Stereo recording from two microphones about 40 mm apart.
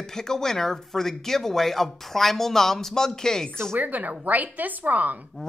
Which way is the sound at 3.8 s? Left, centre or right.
Right.